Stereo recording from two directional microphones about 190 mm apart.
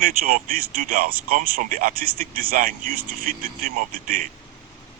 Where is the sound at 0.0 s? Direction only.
50° right (ahead or behind).